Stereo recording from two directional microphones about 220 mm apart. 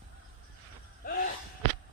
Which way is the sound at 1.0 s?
45° left (ahead or behind).